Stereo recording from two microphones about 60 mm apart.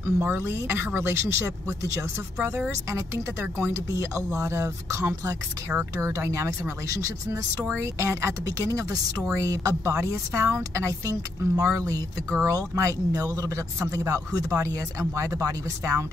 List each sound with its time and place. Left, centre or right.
0.0 s speech: right
3.6 s speech: right
7.7 s speech: right
9.3 s speech: right